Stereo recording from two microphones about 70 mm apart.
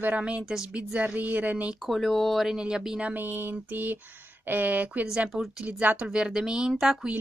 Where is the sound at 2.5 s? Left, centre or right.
Centre.